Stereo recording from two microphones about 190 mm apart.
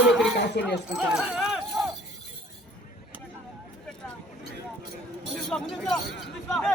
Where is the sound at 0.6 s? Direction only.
60° left (ahead or behind).